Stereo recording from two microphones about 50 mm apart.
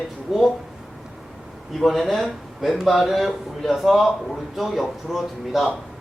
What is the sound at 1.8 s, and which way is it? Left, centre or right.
A man's voice, centre.